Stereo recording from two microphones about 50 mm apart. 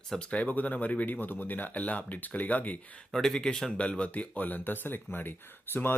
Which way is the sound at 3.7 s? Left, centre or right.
Left.